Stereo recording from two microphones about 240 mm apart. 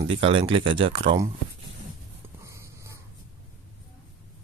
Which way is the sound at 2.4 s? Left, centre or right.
Centre.